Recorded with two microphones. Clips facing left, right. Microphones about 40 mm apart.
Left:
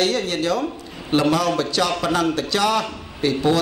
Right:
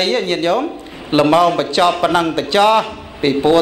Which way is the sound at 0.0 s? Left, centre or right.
Right.